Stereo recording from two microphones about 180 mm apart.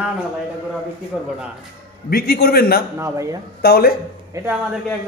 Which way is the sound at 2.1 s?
55° left (ahead or behind).